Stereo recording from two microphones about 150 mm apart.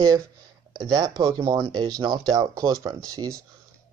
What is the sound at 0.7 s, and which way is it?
Speech, 25° right (ahead or behind).